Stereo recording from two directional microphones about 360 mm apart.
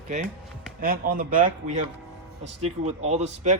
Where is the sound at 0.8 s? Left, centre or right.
Right.